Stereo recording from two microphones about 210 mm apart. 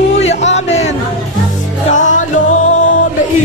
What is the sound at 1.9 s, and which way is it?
Music, 35° left (ahead or behind).